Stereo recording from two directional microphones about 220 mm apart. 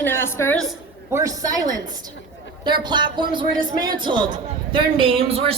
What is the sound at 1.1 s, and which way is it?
Speech, 15° right (ahead or behind).